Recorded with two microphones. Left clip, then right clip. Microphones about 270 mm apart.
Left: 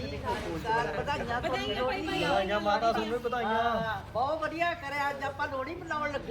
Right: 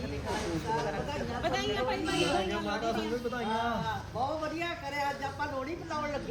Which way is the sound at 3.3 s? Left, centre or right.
Centre.